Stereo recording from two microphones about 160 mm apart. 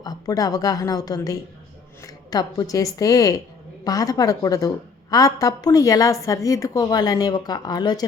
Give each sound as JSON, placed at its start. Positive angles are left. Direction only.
{"t": 0.0, "sound": "a woman's voice", "side_deg": 25}